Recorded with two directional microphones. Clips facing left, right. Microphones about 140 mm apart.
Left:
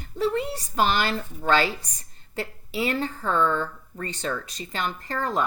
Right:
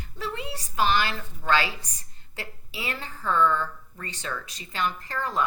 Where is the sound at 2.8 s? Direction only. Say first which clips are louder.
Left 9 dB; 35° left (ahead or behind).